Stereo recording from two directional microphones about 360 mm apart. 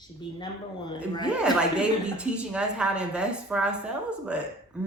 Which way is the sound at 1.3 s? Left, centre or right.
Centre.